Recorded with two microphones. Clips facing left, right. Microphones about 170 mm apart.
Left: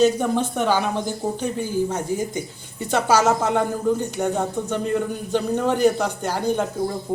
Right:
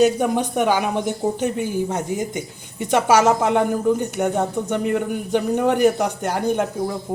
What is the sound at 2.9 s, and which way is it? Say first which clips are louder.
Speech: right 3 dB; 15° right (ahead or behind).